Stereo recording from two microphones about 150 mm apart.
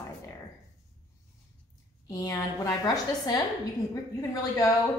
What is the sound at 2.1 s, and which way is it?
A woman's voice, 20° left (ahead or behind).